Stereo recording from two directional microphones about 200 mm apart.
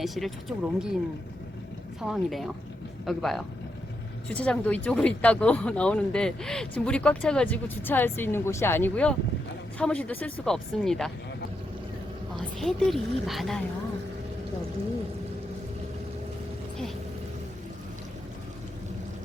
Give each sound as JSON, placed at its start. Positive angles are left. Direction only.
{"t": 0.0, "sound": "speech", "side_deg": 0}
{"t": 2.0, "sound": "speech", "side_deg": 0}
{"t": 12.5, "sound": "speech", "side_deg": 0}